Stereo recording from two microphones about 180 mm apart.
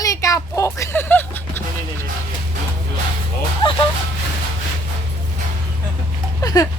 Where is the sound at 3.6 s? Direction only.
25° left (ahead or behind).